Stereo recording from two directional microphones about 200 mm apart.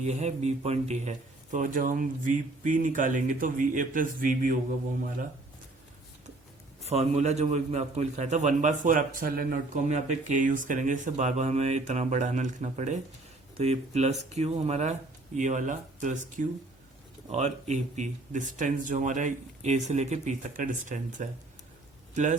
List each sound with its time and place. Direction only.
0.0 s a man's voice: 35° right (ahead or behind)
6.8 s a man's voice: 30° right (ahead or behind)